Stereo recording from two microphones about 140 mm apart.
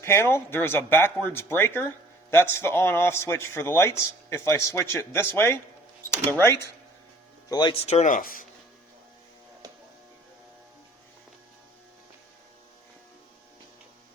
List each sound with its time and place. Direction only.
0.0 s a man's voice: 20° left (ahead or behind)
7.5 s speech: 30° left (ahead or behind)
7.9 s speech: 55° left (ahead or behind); by 8.4 s 85° left